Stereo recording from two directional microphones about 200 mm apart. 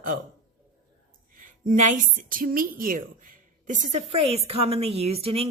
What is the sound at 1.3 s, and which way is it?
A woman's voice, 40° right (ahead or behind).